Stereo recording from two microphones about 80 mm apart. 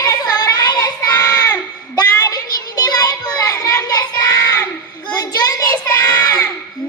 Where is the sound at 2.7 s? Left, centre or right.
Left.